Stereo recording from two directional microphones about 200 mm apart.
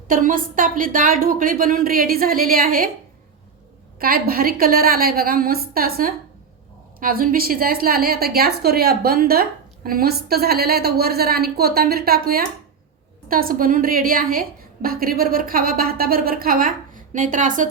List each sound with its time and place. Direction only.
0.1 s a woman's voice: 40° right (ahead or behind)
4.0 s a woman's voice: 50° right (ahead or behind)